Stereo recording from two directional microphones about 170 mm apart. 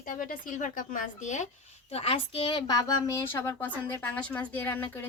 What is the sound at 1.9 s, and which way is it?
A woman's voice, 35° left (ahead or behind).